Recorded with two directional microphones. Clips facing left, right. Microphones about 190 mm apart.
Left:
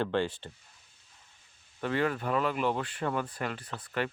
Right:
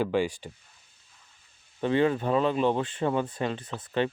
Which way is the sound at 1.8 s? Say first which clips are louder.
Right 6 dB; 20° right (ahead or behind).